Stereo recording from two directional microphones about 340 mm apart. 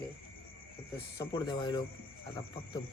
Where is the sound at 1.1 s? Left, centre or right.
Centre.